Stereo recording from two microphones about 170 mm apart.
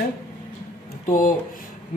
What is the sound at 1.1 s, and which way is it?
Speech, 55° left (ahead or behind).